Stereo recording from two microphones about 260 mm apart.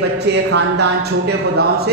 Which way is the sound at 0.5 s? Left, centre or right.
Right.